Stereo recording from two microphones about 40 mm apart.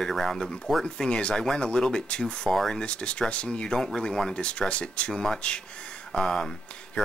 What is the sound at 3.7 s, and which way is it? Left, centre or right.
Speech, centre.